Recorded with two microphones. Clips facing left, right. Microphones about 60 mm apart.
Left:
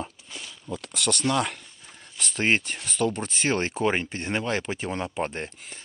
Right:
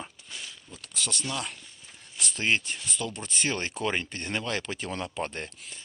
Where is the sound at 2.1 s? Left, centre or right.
Left.